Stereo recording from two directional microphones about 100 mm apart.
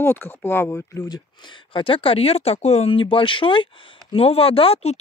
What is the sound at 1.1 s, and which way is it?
Speech, 55° left (ahead or behind).